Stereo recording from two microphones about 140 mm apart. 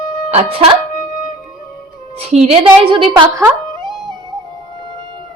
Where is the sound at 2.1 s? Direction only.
50° right (ahead or behind).